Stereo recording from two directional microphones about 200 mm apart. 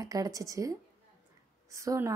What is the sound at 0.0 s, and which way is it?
A woman's voice, 20° right (ahead or behind).